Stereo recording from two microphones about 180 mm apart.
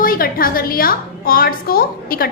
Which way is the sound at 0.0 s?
55° left (ahead or behind).